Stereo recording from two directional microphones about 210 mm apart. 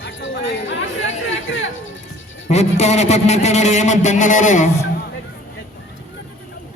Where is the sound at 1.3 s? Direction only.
65° left (ahead or behind).